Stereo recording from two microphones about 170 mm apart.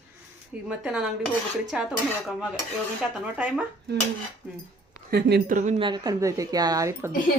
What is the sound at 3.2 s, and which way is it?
Speech, 10° right (ahead or behind).